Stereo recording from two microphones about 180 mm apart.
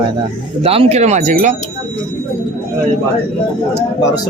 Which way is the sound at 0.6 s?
35° right (ahead or behind).